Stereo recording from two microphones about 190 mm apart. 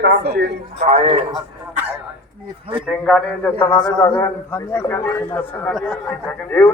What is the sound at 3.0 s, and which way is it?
A man's voice, 5° left (ahead or behind).